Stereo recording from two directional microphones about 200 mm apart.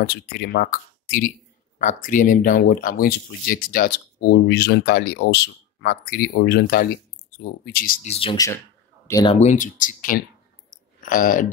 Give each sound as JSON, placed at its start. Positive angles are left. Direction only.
{"t": 0.1, "sound": "speech", "side_deg": 50}
{"t": 9.0, "sound": "speech", "side_deg": 20}
{"t": 9.4, "sound": "speech", "side_deg": 40}